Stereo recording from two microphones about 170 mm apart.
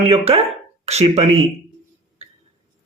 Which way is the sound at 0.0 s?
35° right (ahead or behind).